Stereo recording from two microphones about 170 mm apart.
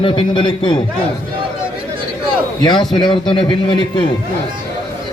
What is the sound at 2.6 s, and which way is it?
Speech, 25° left (ahead or behind).